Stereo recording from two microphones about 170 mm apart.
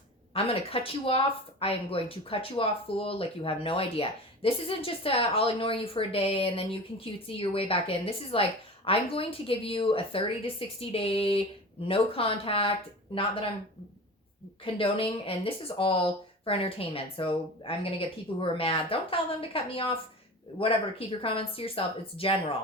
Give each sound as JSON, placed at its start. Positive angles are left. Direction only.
{"t": 0.3, "sound": "speech", "side_deg": 35}
{"t": 14.6, "sound": "speech", "side_deg": 30}
{"t": 21.2, "sound": "speech", "side_deg": 30}